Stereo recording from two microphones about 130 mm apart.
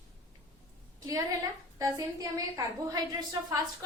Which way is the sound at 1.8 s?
25° right (ahead or behind).